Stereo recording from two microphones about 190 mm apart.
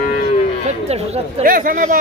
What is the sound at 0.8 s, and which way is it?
Speech, 35° right (ahead or behind).